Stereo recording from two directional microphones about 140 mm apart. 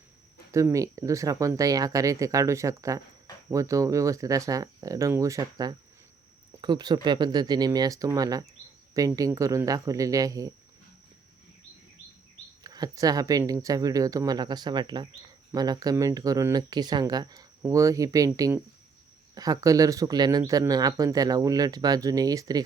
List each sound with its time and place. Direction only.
0.5 s speech: 20° right (ahead or behind)
12.6 s speech: 25° right (ahead or behind)